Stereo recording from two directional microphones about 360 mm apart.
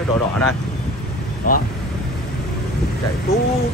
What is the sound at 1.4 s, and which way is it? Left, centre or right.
Speech, left.